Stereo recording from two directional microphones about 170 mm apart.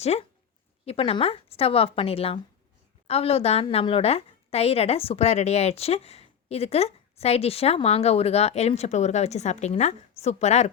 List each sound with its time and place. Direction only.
0.0 s a woman's voice: 40° left (ahead or behind)